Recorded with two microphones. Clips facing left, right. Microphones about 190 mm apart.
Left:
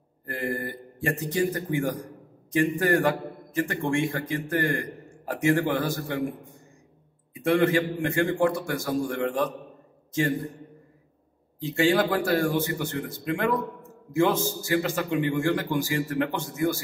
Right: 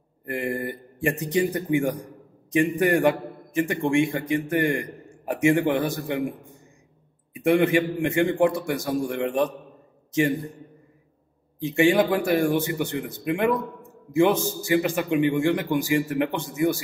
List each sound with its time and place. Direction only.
0.2 s a man's voice: 20° right (ahead or behind)
7.3 s a man's voice: 15° right (ahead or behind)
11.6 s a man's voice: 20° right (ahead or behind)